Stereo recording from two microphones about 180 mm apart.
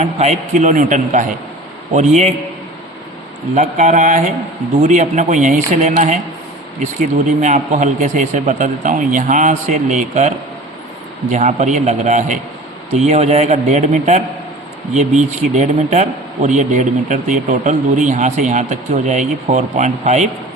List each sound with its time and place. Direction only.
0.0 s a man's voice: 35° right (ahead or behind)
3.5 s a man's voice: 40° right (ahead or behind)